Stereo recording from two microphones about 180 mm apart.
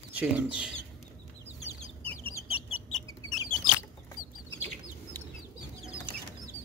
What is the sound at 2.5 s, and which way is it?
Rodents, 35° left (ahead or behind).